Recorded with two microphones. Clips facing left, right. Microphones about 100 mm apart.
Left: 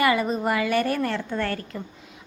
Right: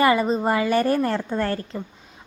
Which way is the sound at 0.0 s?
30° right (ahead or behind).